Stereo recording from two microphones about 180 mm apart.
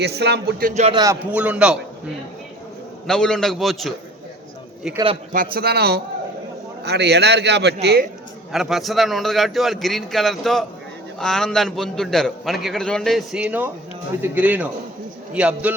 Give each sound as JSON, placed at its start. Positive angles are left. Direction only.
{"t": 0.0, "sound": "speech", "side_deg": -65}
{"t": 0.7, "sound": "speech", "side_deg": -35}
{"t": 0.9, "sound": "a man's voice", "side_deg": -15}
{"t": 3.1, "sound": "a man's voice", "side_deg": 5}
{"t": 5.3, "sound": "a man's voice", "side_deg": -50}
{"t": 8.5, "sound": "a man's voice", "side_deg": 0}